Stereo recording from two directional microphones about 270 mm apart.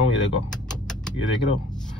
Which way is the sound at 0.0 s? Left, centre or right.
Left.